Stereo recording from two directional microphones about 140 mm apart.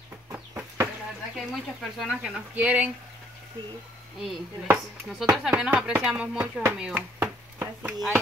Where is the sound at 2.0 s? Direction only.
5° right (ahead or behind).